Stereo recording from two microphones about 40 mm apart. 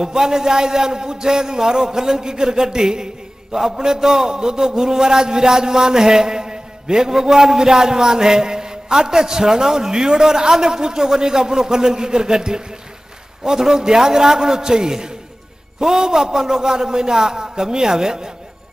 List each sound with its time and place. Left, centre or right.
0.0 s a man's voice: centre